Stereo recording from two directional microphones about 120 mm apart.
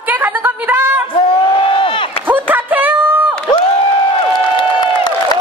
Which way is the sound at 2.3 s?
15° right (ahead or behind).